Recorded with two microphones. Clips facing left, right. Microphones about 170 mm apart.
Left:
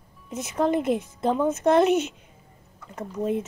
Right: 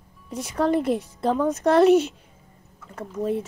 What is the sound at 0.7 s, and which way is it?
Speech, 35° right (ahead or behind).